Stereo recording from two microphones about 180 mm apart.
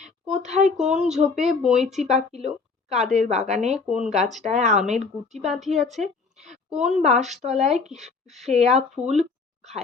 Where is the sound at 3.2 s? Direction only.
40° right (ahead or behind).